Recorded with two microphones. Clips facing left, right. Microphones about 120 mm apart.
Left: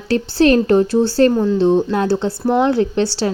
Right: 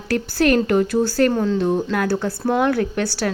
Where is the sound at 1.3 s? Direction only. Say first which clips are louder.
Left 4 dB; 10° left (ahead or behind).